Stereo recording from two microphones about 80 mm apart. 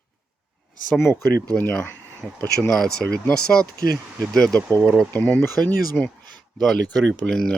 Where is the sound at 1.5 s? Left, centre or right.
Centre.